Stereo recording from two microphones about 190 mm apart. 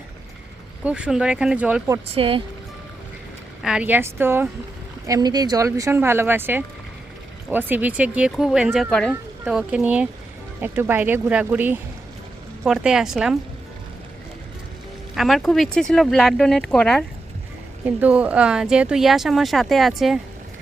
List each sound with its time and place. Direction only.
0.9 s speech: 5° right (ahead or behind)
2.1 s speech: 30° right (ahead or behind)
3.6 s speech: 5° right (ahead or behind)
15.1 s speech: centre (ahead or behind)
17.8 s speech: 5° right (ahead or behind)